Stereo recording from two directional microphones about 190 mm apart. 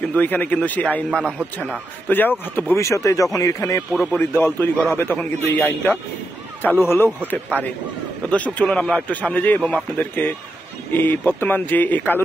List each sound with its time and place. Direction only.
0.1 s a man's voice: 10° left (ahead or behind)
1.4 s speech: 10° right (ahead or behind)
2.0 s a man's voice: 10° left (ahead or behind)
3.9 s a man's voice: centre (ahead or behind)
4.2 s a man's voice: 10° left (ahead or behind)
8.3 s a man's voice: 5° left (ahead or behind)